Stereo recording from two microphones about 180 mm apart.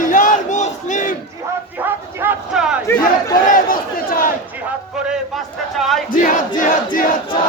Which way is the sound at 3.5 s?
50° left (ahead or behind).